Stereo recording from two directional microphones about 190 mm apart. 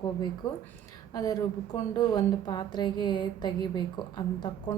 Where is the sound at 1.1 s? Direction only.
20° left (ahead or behind).